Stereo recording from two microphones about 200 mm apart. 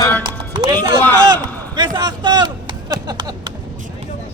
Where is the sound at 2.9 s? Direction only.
20° right (ahead or behind).